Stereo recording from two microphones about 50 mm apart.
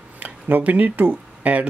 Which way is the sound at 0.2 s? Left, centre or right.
Right.